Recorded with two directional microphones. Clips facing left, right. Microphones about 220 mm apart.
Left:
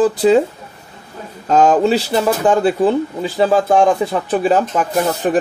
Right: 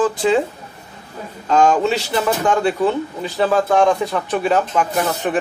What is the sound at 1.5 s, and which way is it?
A man's voice, 40° left (ahead or behind).